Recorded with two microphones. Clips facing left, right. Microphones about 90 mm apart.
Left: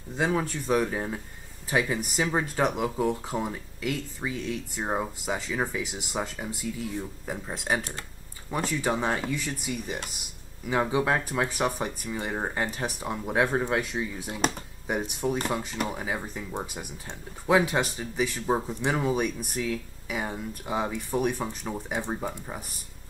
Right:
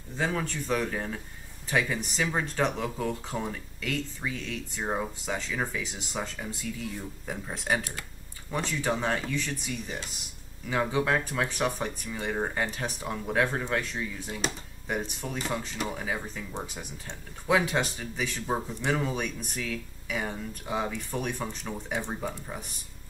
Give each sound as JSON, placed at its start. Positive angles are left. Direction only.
{"t": 0.2, "sound": "speech", "side_deg": 15}